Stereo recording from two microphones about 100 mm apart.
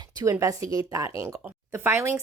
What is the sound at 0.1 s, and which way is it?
Speech, 40° right (ahead or behind).